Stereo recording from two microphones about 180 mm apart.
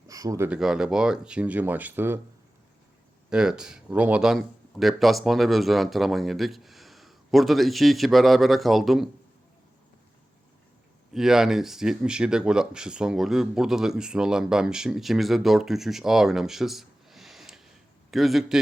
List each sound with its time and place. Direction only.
0.1 s speech: 20° right (ahead or behind)
0.6 s speech: 5° right (ahead or behind)
3.2 s speech: 5° right (ahead or behind)
11.1 s speech: centre (ahead or behind)